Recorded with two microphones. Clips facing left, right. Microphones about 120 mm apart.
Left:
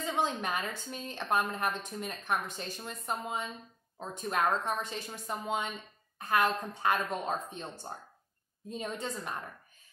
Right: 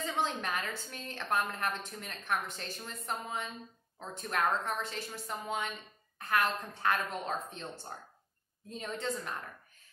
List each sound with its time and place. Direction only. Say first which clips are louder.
0.0 s a woman's voice: left 2 dB; 20° left (ahead or behind)